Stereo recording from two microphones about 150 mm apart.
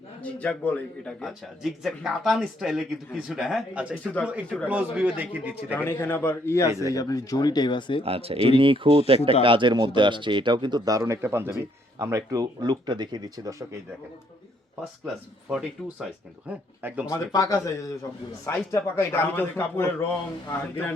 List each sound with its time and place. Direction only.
0.2 s speech: 10° left (ahead or behind)
4.0 s a man's voice: 10° left (ahead or behind)
4.7 s speech: 10° right (ahead or behind)
5.7 s a man's voice: 15° left (ahead or behind); by 8.0 s 30° left (ahead or behind)
8.0 s speech: 40° right (ahead or behind); by 13.7 s 20° right (ahead or behind)
15.0 s speech: centre (ahead or behind)
17.1 s a man's voice: 20° left (ahead or behind)